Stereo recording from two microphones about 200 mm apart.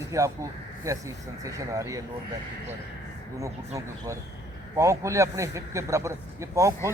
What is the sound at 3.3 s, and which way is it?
Speech, 15° right (ahead or behind).